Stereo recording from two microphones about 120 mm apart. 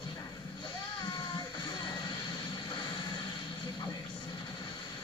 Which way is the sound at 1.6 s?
40° left (ahead or behind).